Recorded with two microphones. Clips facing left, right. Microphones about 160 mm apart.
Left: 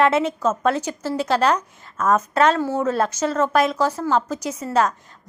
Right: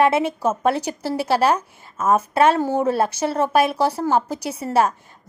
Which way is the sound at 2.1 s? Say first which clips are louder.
Right 2 dB; 10° right (ahead or behind).